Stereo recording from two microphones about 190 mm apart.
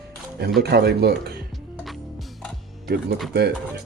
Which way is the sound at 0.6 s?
60° right (ahead or behind).